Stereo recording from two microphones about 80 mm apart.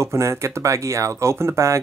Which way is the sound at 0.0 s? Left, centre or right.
Right.